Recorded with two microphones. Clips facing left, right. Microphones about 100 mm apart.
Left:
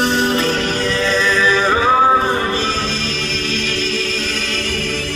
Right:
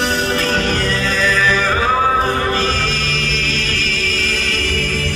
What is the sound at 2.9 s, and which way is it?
Music, 25° left (ahead or behind).